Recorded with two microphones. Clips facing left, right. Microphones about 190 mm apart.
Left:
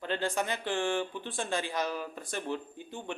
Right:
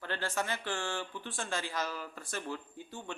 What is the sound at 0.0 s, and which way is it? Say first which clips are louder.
Speech: left 4 dB; 20° left (ahead or behind).